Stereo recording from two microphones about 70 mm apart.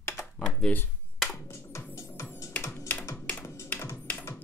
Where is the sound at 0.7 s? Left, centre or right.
Left.